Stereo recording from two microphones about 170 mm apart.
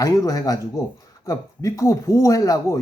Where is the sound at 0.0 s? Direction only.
20° left (ahead or behind).